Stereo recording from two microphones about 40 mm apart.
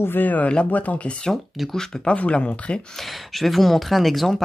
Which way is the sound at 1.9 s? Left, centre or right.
Centre.